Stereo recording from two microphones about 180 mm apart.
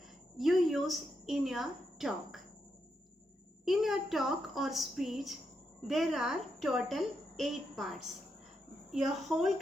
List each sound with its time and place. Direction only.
0.3 s a woman's voice: centre (ahead or behind)
3.7 s a woman's voice: centre (ahead or behind)